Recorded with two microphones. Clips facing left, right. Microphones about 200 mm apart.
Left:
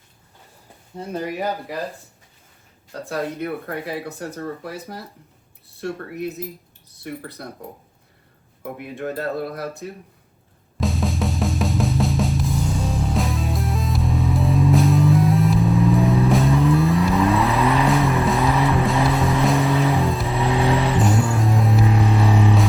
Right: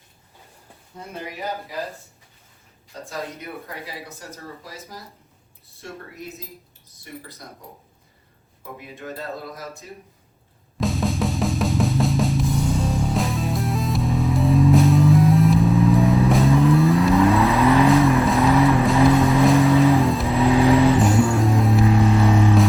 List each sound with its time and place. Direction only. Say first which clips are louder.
1.1 s speech: left 6 dB; 50° left (ahead or behind)
2.9 s speech: left 5 dB; 65° left (ahead or behind)
3.3 s speech: left 8 dB; 50° left (ahead or behind)
5.8 s speech: left 9 dB; 60° left (ahead or behind)
9.0 s speech: left 7 dB; 60° left (ahead or behind)
10.8 s drum: right 1 dB; centre (ahead or behind)